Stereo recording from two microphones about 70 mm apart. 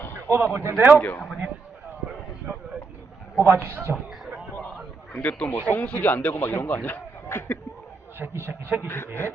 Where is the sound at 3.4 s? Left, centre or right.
Right.